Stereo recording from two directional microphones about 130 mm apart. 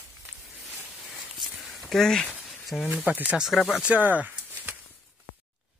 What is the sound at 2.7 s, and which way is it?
Speech, centre (ahead or behind).